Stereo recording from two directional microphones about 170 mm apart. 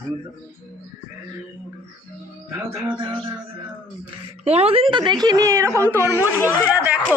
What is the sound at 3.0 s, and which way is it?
Speech, 30° right (ahead or behind).